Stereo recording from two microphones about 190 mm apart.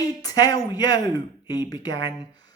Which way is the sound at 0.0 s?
20° left (ahead or behind).